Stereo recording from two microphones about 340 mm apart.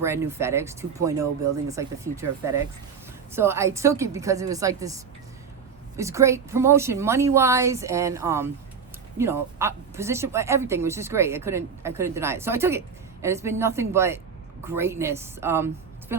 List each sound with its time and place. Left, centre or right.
0.0 s speech: centre